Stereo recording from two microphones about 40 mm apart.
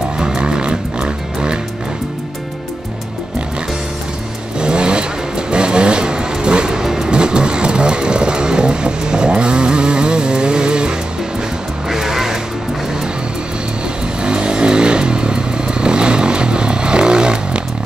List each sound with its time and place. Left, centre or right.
0.2 s music: right
4.6 s vehicle: right
7.1 s vehicle: right
11.9 s music: centre
14.2 s motorcycle: right